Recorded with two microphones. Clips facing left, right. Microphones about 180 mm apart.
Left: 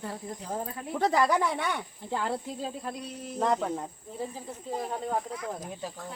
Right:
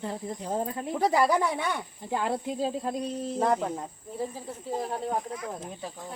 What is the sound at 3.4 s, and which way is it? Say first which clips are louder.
Speech: right 1 dB; 10° right (ahead or behind).